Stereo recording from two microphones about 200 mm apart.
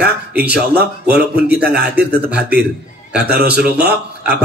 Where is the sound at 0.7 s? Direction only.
50° right (ahead or behind).